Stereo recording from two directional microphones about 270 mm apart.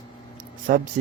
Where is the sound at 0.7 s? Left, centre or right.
Right.